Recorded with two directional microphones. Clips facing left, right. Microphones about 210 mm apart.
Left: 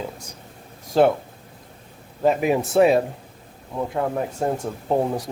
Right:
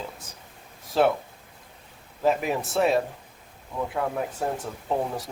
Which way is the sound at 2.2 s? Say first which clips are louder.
Left 5 dB; centre (ahead or behind).